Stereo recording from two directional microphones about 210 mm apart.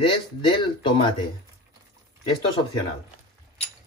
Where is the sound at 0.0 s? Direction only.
25° left (ahead or behind).